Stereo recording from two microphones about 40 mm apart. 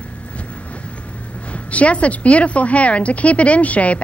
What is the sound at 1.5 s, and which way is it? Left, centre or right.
A woman's voice, left.